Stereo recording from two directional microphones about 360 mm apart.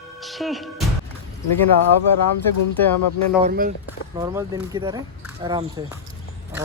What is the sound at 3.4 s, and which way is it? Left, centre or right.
Speech, right.